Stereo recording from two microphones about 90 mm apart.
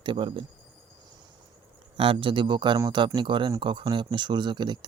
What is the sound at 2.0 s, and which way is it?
Speech, 80° right.